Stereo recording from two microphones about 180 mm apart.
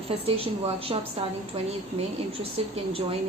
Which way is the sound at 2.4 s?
30° right (ahead or behind).